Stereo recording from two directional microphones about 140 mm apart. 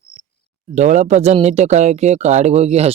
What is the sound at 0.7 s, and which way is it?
Speech, 60° right (ahead or behind).